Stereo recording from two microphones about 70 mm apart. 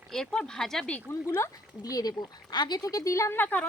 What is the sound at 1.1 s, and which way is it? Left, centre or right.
Speech, left.